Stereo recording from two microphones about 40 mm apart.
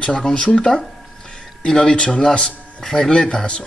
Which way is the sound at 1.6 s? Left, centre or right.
Centre.